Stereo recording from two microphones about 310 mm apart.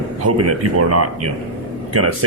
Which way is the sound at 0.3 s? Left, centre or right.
Right.